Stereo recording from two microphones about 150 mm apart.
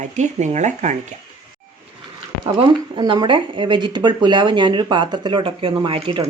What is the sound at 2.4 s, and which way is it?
Speech, 30° right (ahead or behind).